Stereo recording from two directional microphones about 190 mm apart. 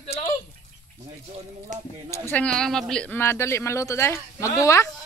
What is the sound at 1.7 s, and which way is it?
Speech, 40° right (ahead or behind).